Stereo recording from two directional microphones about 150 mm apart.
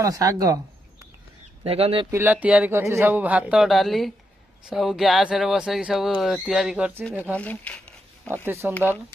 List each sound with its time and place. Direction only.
0.0 s speech: 25° right (ahead or behind)
1.6 s speech: 40° right (ahead or behind)
2.0 s speech: 15° right (ahead or behind)
7.3 s a sound: 10° left (ahead or behind)
8.3 s speech: 15° right (ahead or behind)